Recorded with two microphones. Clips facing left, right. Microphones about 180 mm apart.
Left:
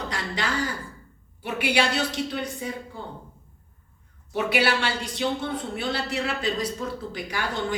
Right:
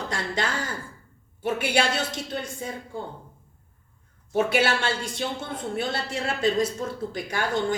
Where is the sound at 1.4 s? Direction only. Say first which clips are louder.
Right 1 dB; 45° right (ahead or behind).